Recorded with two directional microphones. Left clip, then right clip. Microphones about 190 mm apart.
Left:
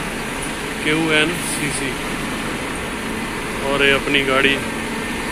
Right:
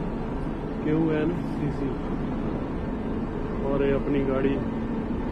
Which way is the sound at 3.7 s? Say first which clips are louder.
Left 10 dB; 5° left (ahead or behind).